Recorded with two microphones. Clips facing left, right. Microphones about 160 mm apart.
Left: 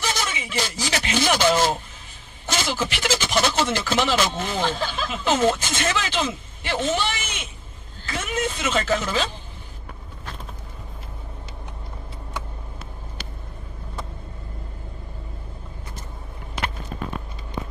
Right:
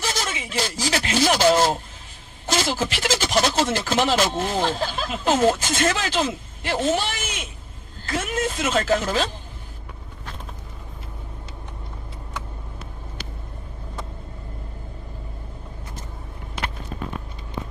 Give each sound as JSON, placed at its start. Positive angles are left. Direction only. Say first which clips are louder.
{"t": 0.0, "sound": "speech", "louder": "even", "side_deg": -40}